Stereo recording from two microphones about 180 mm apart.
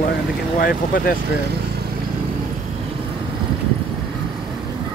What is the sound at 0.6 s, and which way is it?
Speech, 55° left (ahead or behind).